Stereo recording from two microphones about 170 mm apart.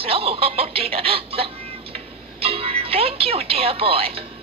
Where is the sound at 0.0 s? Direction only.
35° right (ahead or behind).